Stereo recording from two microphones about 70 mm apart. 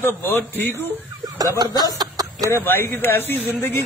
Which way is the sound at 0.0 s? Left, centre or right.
Left.